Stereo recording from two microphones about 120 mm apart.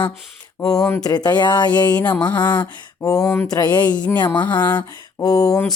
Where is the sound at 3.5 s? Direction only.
35° left (ahead or behind).